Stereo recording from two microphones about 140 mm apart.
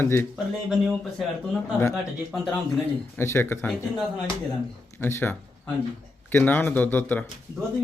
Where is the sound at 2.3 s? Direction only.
Centre (ahead or behind).